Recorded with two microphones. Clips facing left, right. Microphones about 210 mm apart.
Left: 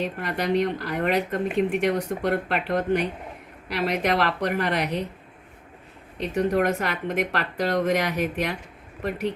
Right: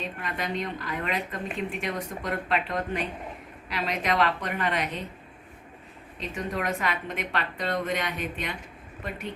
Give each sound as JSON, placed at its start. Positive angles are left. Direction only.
{"t": 0.0, "sound": "speech", "side_deg": 70}
{"t": 6.1, "sound": "speech", "side_deg": 65}